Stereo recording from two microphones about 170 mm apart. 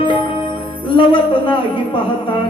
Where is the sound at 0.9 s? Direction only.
30° left (ahead or behind).